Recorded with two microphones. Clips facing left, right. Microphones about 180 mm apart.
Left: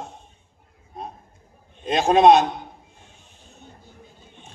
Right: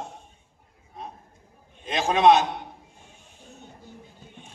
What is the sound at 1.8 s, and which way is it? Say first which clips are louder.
Speech: left 5 dB; 35° left (ahead or behind).